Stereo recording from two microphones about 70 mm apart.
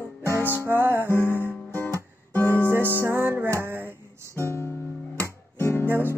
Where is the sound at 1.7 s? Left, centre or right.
Left.